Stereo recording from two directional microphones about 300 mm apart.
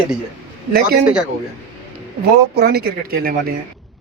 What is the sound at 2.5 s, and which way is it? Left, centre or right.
Speech, right.